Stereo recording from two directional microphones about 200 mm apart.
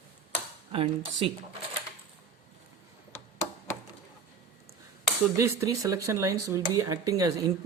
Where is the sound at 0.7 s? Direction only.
25° right (ahead or behind).